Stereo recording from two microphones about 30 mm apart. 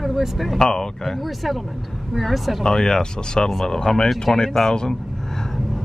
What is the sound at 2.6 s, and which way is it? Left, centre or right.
Speech, left.